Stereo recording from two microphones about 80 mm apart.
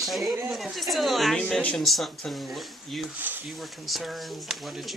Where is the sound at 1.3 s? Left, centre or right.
Centre.